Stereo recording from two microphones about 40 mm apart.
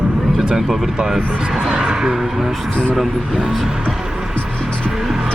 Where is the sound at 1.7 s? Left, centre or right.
Centre.